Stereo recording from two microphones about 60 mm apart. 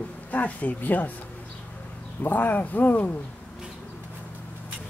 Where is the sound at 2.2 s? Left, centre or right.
Left.